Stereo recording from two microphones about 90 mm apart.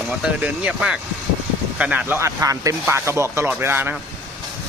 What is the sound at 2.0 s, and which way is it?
Speech, 30° right (ahead or behind).